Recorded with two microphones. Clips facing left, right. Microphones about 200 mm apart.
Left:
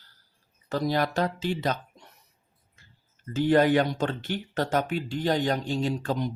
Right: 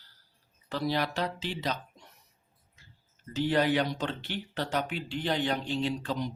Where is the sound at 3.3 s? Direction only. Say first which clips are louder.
Left 6 dB; 50° left (ahead or behind).